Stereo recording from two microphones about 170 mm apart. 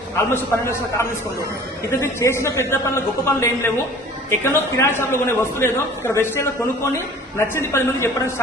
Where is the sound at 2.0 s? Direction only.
15° left (ahead or behind).